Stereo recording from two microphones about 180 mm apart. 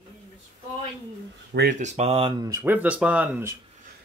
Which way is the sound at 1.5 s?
60° right (ahead or behind).